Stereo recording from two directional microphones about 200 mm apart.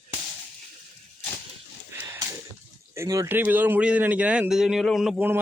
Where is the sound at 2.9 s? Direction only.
15° right (ahead or behind).